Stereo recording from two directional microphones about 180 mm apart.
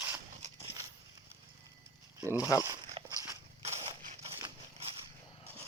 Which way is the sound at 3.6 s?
35° right (ahead or behind).